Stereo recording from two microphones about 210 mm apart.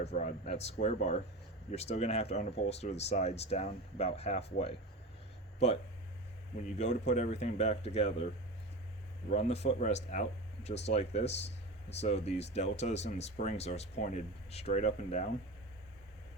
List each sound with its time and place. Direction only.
0.0 s speech: 35° left (ahead or behind)
6.7 s speech: 35° left (ahead or behind)
9.3 s speech: 30° left (ahead or behind)